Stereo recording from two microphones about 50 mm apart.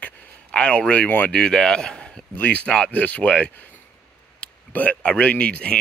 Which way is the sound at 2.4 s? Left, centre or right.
Left.